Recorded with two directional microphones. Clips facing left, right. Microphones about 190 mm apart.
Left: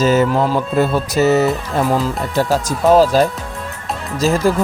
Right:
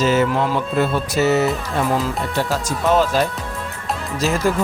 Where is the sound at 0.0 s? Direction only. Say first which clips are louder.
Left 3 dB; 40° left (ahead or behind).